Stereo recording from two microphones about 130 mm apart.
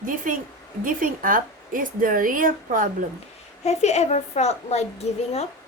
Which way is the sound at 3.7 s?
60° left (ahead or behind).